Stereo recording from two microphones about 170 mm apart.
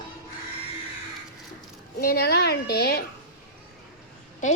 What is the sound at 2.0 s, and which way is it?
Speech, 65° left (ahead or behind).